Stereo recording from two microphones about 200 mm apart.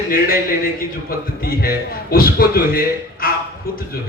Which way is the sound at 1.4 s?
50° left (ahead or behind).